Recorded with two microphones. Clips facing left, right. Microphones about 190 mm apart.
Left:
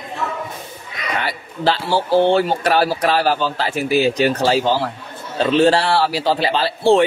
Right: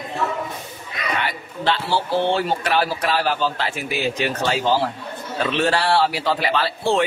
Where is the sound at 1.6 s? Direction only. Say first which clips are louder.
Left 3 dB; 40° left (ahead or behind).